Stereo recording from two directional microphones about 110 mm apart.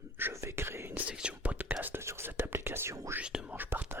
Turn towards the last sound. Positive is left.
turn(degrees=-15)  # may be behind; listen again after turning